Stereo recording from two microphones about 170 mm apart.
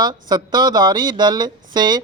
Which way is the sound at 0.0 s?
25° right (ahead or behind).